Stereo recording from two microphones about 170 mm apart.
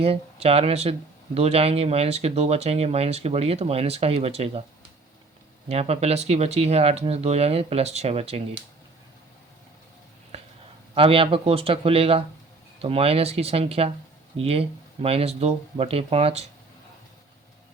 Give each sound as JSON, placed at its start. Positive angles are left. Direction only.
{"t": 0.0, "sound": "speech", "side_deg": -35}
{"t": 5.6, "sound": "speech", "side_deg": -35}
{"t": 10.3, "sound": "a sound", "side_deg": -40}
{"t": 10.9, "sound": "speech", "side_deg": -35}